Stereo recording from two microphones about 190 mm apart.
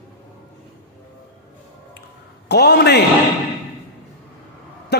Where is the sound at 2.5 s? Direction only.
60° left (ahead or behind).